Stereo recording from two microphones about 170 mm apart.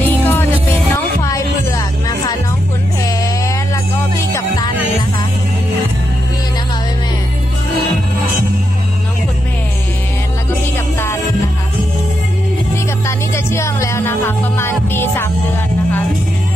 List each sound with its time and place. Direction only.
0.0 s music: 10° left (ahead or behind)
13.0 s music: 15° left (ahead or behind)